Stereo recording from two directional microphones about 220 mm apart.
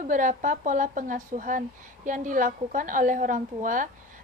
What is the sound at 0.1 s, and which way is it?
A woman's voice, 35° right (ahead or behind).